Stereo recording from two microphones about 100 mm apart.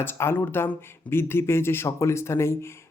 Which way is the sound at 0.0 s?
25° left (ahead or behind).